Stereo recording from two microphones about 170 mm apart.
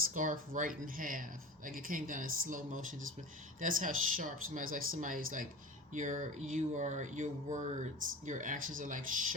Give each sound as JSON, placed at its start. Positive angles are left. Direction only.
{"t": 0.1, "sound": "speech", "side_deg": -50}